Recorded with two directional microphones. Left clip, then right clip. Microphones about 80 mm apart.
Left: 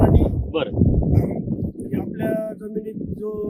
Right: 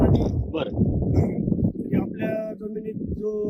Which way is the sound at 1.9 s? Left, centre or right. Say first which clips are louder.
Left 4 dB; left.